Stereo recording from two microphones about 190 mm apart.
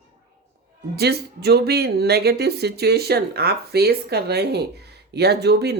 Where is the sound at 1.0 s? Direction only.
60° right (ahead or behind).